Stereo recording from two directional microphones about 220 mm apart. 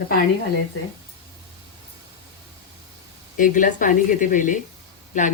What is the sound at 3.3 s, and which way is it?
Speech, 35° left (ahead or behind).